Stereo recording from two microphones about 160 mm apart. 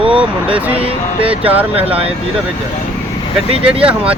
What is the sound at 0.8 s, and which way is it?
Speech, 35° right (ahead or behind).